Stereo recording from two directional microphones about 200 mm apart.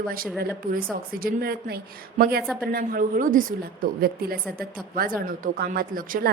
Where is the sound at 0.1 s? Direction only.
50° right (ahead or behind).